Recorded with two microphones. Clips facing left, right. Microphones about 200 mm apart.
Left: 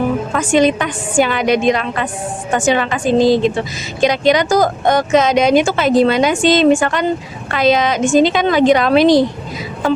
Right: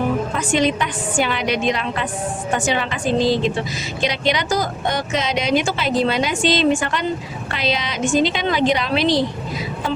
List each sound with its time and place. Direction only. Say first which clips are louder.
0.3 s speech: left 9 dB; 50° left (ahead or behind)